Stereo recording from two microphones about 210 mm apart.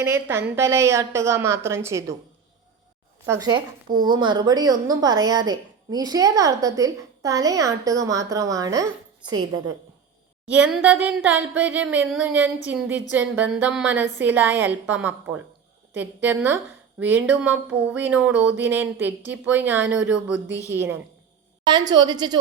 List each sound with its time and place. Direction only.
0.0 s a woman's voice: 10° right (ahead or behind)
3.2 s a woman's voice: 15° right (ahead or behind)
10.4 s a woman's voice: 5° right (ahead or behind); by 22.4 s 20° right (ahead or behind)